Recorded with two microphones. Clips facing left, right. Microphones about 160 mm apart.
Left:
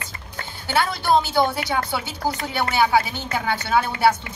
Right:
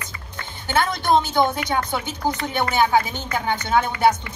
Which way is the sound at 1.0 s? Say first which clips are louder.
Even; 20° right (ahead or behind).